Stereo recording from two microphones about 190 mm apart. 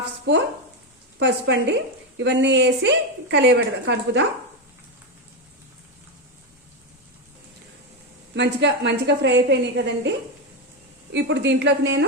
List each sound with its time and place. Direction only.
0.3 s a woman's voice: 65° right (ahead or behind)
8.4 s a woman's voice: 65° right (ahead or behind)
11.1 s a woman's voice: 70° right (ahead or behind)